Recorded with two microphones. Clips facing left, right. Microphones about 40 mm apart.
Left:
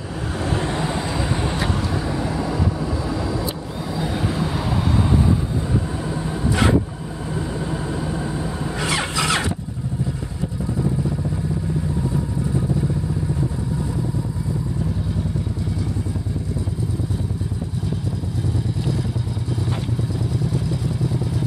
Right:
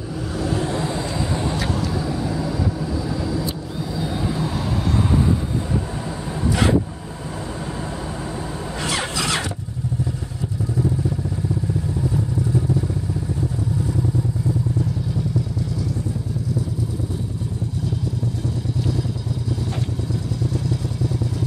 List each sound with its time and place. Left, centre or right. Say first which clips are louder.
0.5 s vehicle: even; left
4.4 s vehicle: left 1 dB; centre